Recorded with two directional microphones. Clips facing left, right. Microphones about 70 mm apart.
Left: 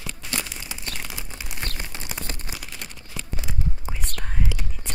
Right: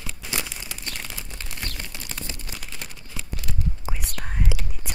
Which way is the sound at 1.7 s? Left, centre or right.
Left.